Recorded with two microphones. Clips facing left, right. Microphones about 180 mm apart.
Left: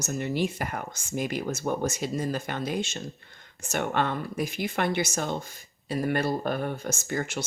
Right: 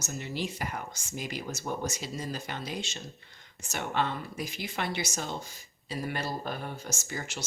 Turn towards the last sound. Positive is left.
turn(degrees=55)  # may be behind; listen again after turning